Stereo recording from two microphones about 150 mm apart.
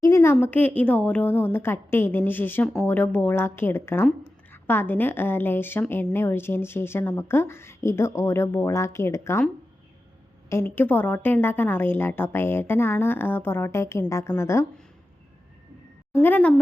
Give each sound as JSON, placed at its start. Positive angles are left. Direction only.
{"t": 0.0, "sound": "a sound", "side_deg": 20}
{"t": 0.4, "sound": "a woman's voice", "side_deg": 10}
{"t": 10.5, "sound": "a woman's voice", "side_deg": 15}
{"t": 16.1, "sound": "a woman's voice", "side_deg": 10}